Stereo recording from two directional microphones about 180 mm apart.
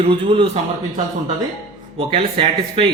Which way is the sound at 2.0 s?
30° right (ahead or behind).